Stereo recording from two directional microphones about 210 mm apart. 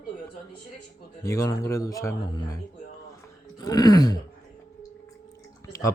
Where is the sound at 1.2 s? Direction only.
15° left (ahead or behind).